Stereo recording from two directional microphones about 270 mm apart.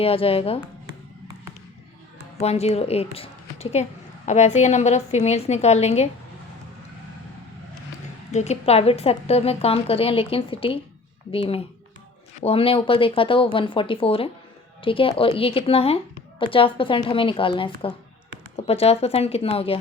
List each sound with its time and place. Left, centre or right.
0.0 s a woman's voice: left
2.4 s a woman's voice: left
8.3 s a woman's voice: left